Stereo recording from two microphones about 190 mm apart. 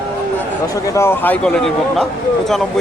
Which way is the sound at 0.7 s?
15° left (ahead or behind).